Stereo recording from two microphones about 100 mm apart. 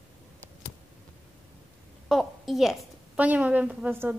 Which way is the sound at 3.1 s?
15° right (ahead or behind).